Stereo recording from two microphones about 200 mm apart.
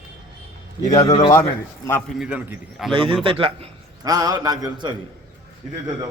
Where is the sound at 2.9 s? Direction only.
25° right (ahead or behind).